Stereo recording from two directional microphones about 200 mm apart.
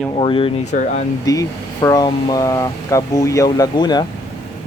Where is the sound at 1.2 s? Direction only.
15° left (ahead or behind).